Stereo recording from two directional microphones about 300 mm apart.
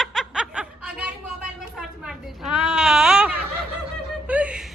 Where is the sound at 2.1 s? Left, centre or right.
Centre.